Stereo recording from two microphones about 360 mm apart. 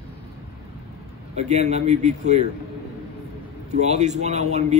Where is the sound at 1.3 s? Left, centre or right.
Centre.